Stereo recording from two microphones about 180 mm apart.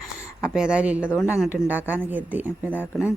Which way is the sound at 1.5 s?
10° right (ahead or behind).